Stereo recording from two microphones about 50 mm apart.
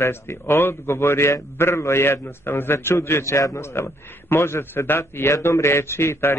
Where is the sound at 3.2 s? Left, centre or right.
Left.